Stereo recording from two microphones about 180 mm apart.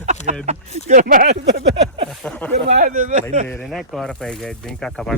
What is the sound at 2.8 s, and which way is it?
Speech, 50° right (ahead or behind).